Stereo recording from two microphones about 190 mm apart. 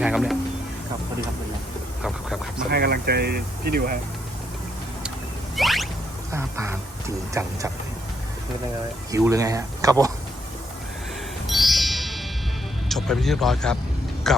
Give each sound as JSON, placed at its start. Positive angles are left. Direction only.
{"t": 0.0, "sound": "speech", "side_deg": 0}
{"t": 2.0, "sound": "dog", "side_deg": 0}
{"t": 2.6, "sound": "speech", "side_deg": -55}
{"t": 5.5, "sound": "a sound", "side_deg": 0}
{"t": 6.3, "sound": "speech", "side_deg": -15}
{"t": 9.1, "sound": "speech", "side_deg": -15}
{"t": 11.4, "sound": "music", "side_deg": 0}
{"t": 12.9, "sound": "speech", "side_deg": 0}